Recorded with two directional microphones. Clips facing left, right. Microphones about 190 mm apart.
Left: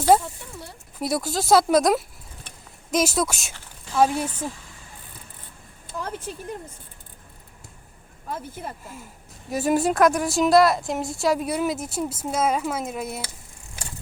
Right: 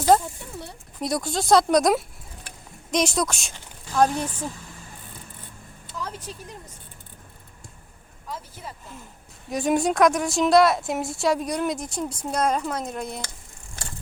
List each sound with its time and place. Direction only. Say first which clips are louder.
0.1 s a woman's voice: even; 5° left (ahead or behind)
5.9 s vehicle: left 3 dB; 50° left (ahead or behind)
8.3 s speech: left 4 dB; 55° left (ahead or behind)
9.5 s a woman's voice: left 1 dB; 5° left (ahead or behind)